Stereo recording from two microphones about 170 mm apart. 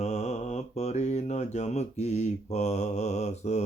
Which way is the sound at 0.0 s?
40° left (ahead or behind).